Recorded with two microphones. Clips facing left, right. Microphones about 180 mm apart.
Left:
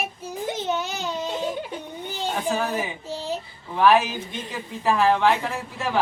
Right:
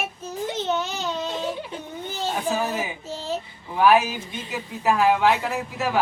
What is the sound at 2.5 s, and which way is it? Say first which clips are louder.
Speech: even; 10° right (ahead or behind).